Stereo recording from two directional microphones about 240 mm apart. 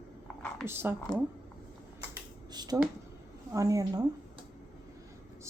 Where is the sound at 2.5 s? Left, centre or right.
Centre.